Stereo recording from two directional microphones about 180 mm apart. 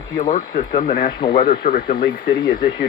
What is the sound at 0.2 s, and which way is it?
Speech, 40° left (ahead or behind).